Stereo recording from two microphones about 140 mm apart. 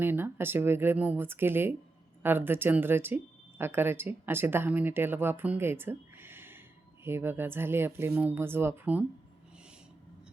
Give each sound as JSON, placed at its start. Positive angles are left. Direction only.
{"t": 0.0, "sound": "speech", "side_deg": -15}